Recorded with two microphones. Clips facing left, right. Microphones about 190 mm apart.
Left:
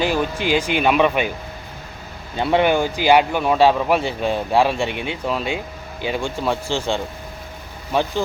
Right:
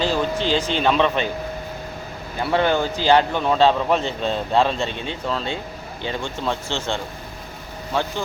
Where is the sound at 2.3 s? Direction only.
20° left (ahead or behind).